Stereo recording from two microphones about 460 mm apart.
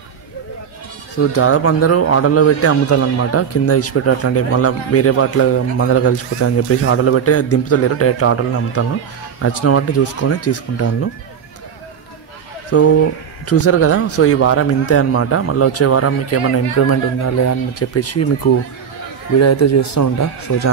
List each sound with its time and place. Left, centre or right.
1.1 s speech: left
12.7 s speech: left